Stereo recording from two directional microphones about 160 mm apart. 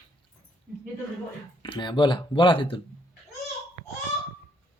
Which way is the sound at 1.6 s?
30° left (ahead or behind).